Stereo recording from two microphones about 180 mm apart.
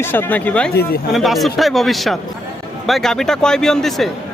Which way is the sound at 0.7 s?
60° left (ahead or behind).